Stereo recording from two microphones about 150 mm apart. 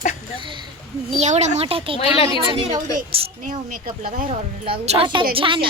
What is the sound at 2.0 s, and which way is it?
Speech, 40° left (ahead or behind).